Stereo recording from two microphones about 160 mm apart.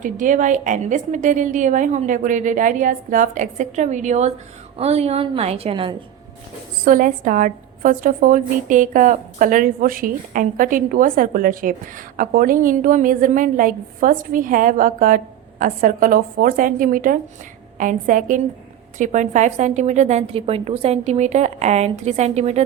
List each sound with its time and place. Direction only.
0.0 s a woman's voice: 55° right (ahead or behind); by 6.0 s 30° right (ahead or behind)
6.8 s a woman's voice: 55° right (ahead or behind)